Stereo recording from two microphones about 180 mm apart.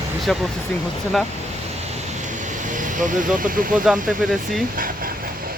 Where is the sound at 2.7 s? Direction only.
45° right (ahead or behind).